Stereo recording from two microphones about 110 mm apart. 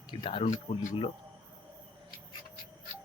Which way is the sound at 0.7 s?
60° left (ahead or behind).